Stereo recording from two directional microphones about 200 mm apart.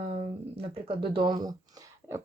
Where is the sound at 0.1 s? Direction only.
30° right (ahead or behind).